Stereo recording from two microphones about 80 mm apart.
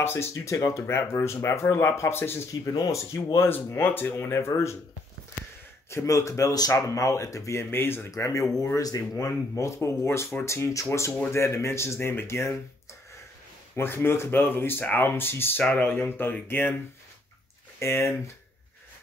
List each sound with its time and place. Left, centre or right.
0.0 s speech: left
2.6 s speech: left
3.3 s speech: left
5.9 s speech: left
7.7 s speech: left
8.1 s speech: left
13.7 s speech: left
17.7 s speech: left